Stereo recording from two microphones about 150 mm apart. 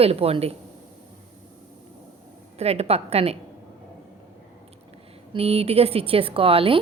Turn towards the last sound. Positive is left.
turn(degrees=-40)  # may be behind; listen again after turning